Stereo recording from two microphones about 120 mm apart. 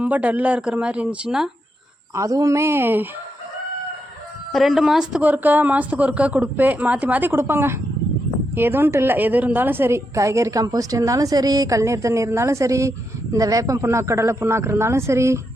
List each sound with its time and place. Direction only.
0.0 s a woman's voice: 10° right (ahead or behind)
2.1 s a woman's voice: 30° right (ahead or behind)
4.5 s a woman's voice: centre (ahead or behind); by 15.4 s 25° right (ahead or behind)